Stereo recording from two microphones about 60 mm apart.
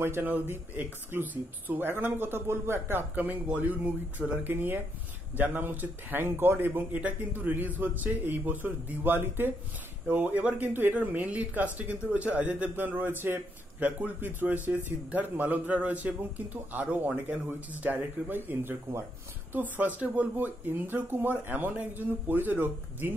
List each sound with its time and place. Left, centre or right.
0.0 s speech: right
3.2 s a man's voice: right